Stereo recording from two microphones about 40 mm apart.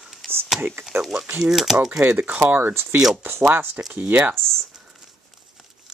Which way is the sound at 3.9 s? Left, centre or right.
Right.